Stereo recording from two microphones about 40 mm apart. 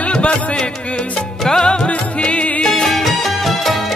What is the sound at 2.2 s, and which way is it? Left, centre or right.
Music, left.